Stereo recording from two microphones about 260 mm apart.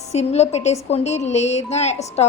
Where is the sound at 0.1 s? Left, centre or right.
Left.